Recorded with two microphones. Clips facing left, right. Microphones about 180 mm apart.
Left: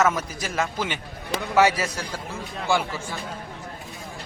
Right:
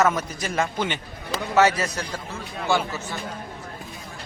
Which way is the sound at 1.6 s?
10° left (ahead or behind).